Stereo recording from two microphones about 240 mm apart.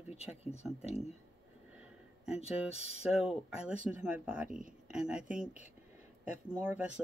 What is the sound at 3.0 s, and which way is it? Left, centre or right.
Speech, centre.